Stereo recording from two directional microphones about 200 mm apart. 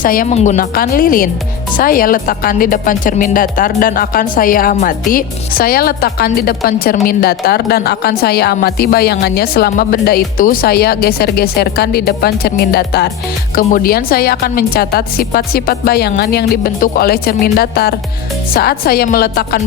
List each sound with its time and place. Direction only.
0.0 s a woman's voice: 45° left (ahead or behind)